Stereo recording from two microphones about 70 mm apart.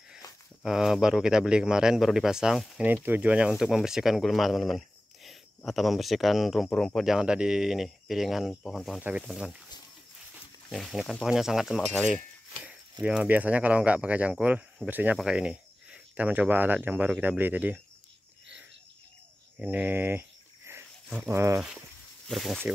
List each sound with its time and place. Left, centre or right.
0.7 s speech: centre
2.8 s speech: right
3.4 s speech: centre
6.7 s speech: centre
7.0 s speech: centre
10.7 s speech: centre
13.0 s speech: right
15.1 s speech: centre
19.6 s a sound: right
21.3 s speech: right
22.3 s speech: centre